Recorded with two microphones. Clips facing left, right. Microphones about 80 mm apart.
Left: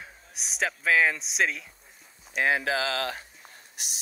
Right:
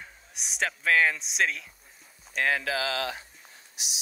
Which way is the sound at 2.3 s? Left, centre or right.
Centre.